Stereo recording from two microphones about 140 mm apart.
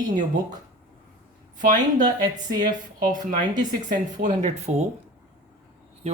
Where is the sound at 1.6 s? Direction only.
70° right (ahead or behind).